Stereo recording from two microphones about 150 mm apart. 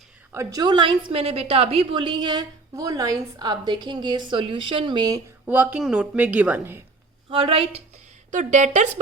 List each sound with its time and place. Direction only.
0.3 s a woman's voice: 25° right (ahead or behind)
5.5 s a woman's voice: 10° right (ahead or behind)
7.3 s speech: 40° right (ahead or behind)
8.3 s a woman's voice: 55° right (ahead or behind)